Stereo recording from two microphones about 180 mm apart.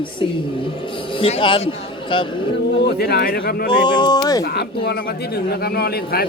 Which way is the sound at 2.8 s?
60° left (ahead or behind).